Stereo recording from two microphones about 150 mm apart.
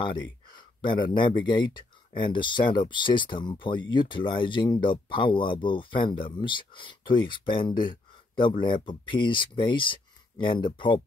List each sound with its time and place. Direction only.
0.8 s speech: 30° left (ahead or behind)